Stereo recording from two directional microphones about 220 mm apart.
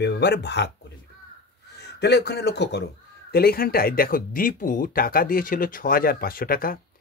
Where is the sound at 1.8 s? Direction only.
50° left (ahead or behind).